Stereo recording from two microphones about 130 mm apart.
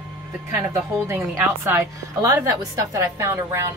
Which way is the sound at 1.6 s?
20° right (ahead or behind).